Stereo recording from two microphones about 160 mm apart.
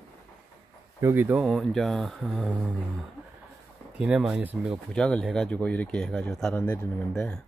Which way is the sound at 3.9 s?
5° right (ahead or behind).